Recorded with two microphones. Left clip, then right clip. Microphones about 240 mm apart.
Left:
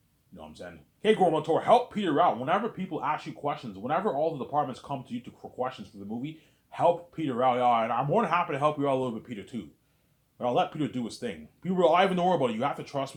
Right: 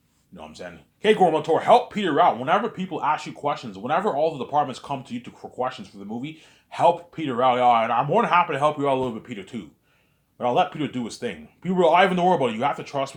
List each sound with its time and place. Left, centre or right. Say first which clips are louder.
0.3 s speech: right 6 dB; right